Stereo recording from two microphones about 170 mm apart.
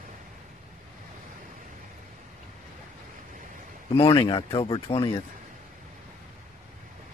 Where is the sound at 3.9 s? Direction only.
35° left (ahead or behind).